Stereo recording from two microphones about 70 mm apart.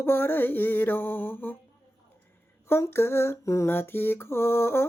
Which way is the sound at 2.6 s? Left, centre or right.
Left.